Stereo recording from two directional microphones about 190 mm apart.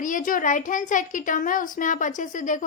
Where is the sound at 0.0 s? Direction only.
45° left (ahead or behind).